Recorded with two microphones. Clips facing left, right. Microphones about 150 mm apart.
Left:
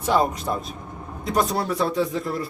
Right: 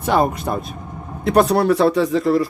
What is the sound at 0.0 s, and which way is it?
Speech, 60° right (ahead or behind).